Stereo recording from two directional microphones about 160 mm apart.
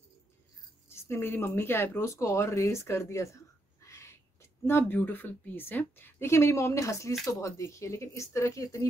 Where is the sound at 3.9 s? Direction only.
15° left (ahead or behind).